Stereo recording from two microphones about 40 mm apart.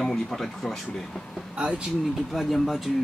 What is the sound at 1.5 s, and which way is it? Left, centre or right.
Speech, right.